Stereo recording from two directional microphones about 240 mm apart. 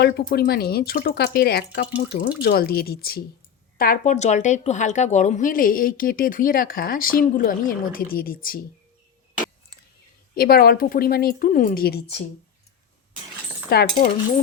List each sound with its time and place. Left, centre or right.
0.0 s speech: left
10.3 s speech: left
13.7 s speech: left